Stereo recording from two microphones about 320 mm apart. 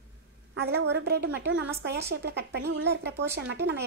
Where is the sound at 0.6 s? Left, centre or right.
Right.